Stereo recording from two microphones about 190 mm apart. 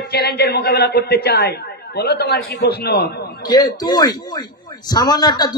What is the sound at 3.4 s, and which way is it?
A man's voice, 20° left (ahead or behind).